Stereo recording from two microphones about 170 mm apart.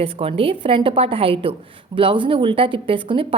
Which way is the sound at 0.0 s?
35° right (ahead or behind).